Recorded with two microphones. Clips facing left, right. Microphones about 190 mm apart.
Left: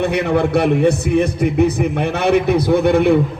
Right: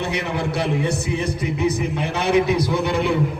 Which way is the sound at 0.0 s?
55° left (ahead or behind).